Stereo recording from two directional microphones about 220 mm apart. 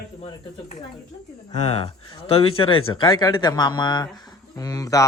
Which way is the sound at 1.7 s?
25° left (ahead or behind).